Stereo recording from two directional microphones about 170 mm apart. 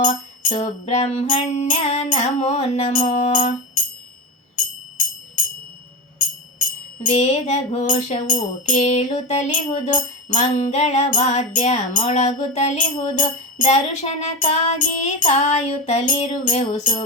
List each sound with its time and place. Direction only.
0.0 s music: 50° left (ahead or behind)
6.1 s music: 50° left (ahead or behind)